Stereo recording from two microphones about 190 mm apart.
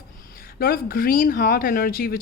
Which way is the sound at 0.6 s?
50° left (ahead or behind).